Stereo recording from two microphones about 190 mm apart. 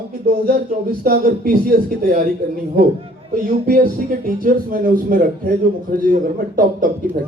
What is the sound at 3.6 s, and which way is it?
A man's voice, 50° right (ahead or behind).